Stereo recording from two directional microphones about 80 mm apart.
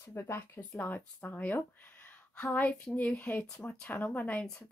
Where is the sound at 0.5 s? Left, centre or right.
Left.